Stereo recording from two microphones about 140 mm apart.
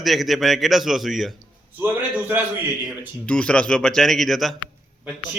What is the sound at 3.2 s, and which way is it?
A man's voice, 10° left (ahead or behind).